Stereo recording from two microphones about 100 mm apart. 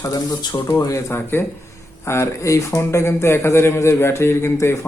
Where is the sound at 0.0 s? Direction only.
35° left (ahead or behind).